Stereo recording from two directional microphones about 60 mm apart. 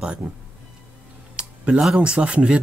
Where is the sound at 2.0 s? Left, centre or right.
Centre.